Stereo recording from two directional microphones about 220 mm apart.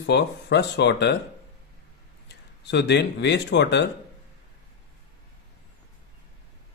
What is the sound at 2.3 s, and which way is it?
Speech, 50° left (ahead or behind).